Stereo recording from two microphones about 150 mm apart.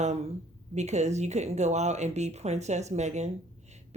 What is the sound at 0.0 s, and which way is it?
Speech, 45° right (ahead or behind).